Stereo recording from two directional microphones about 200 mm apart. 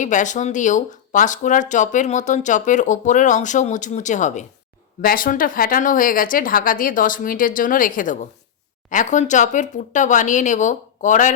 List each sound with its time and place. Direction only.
0.0 s speech: 40° left (ahead or behind)